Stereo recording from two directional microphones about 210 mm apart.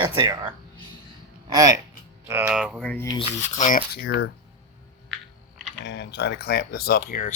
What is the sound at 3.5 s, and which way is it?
Speech, 35° left (ahead or behind).